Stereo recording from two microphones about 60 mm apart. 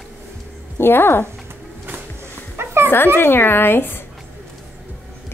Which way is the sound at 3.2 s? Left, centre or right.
Left.